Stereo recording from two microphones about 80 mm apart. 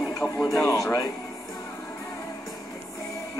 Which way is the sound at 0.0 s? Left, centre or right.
Left.